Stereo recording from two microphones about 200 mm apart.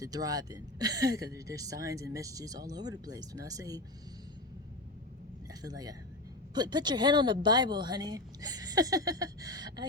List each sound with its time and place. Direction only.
0.0 s speech: 20° right (ahead or behind)
5.6 s a woman's voice: 20° right (ahead or behind)